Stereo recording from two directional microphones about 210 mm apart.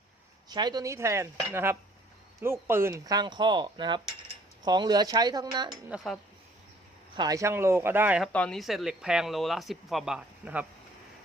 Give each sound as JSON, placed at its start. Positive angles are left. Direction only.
{"t": 0.4, "sound": "cutlery", "side_deg": -20}
{"t": 5.7, "sound": "speech", "side_deg": 0}
{"t": 7.2, "sound": "cutlery", "side_deg": -15}
{"t": 8.3, "sound": "speech", "side_deg": 5}